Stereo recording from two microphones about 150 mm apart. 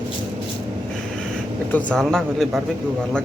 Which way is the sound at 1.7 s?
5° left (ahead or behind).